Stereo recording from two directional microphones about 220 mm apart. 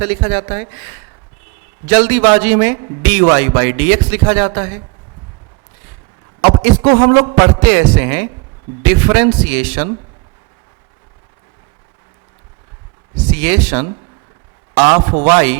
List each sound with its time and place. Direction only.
0.0 s a man's voice: 10° right (ahead or behind)
6.6 s a man's voice: 10° right (ahead or behind)
13.1 s a man's voice: 10° right (ahead or behind)